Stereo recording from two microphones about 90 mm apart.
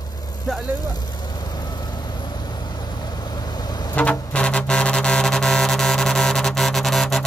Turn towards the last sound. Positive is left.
turn(degrees=5)  # may be behind; listen again after turning